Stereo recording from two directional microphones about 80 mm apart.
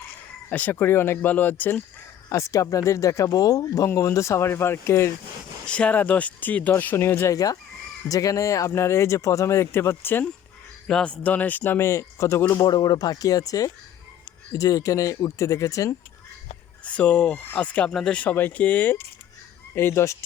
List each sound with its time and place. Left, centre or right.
0.5 s speech: left
2.3 s speech: left
5.6 s speech: centre; by 7.3 s left
7.3 s speech: left
10.8 s speech: centre
11.9 s speech: left
12.6 s speech: left
16.8 s speech: centre
17.9 s speech: centre
18.2 s speech: left